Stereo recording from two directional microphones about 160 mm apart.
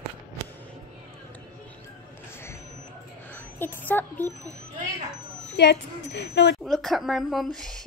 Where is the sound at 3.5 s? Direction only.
15° left (ahead or behind).